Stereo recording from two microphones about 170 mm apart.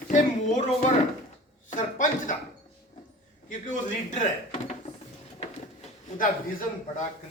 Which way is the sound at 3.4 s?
50° left (ahead or behind).